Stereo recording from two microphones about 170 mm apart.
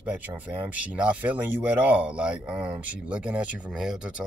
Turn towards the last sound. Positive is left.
turn(degrees=-5)  # may be behind; listen again after turning